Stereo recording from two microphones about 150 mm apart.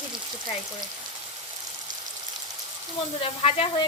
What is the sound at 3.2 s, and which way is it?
Speech, 40° left (ahead or behind).